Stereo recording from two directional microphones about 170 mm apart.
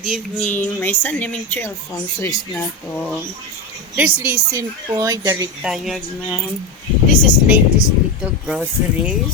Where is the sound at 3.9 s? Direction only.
10° right (ahead or behind).